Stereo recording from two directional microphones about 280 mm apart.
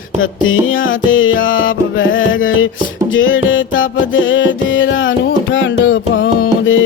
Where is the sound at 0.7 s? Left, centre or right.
Left.